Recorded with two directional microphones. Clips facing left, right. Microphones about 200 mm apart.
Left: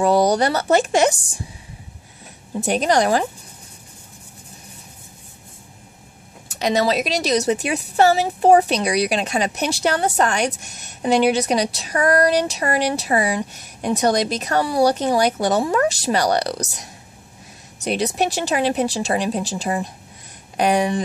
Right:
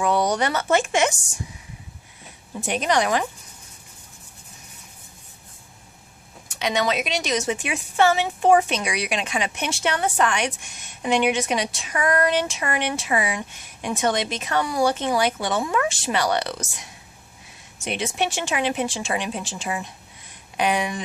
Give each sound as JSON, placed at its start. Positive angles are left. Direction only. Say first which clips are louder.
{"t": 0.0, "sound": "speech", "louder": "left 5 dB", "side_deg": 35}
{"t": 2.6, "sound": "speech", "louder": "left 4 dB", "side_deg": 40}
{"t": 6.5, "sound": "speech", "louder": "left 4 dB", "side_deg": 40}
{"t": 17.8, "sound": "speech", "louder": "left 5 dB", "side_deg": 40}